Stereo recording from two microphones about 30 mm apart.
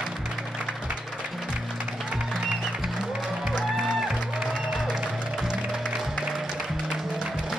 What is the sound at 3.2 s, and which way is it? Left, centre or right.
Music, right.